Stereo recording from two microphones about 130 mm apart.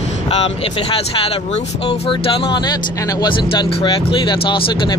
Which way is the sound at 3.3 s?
40° left (ahead or behind).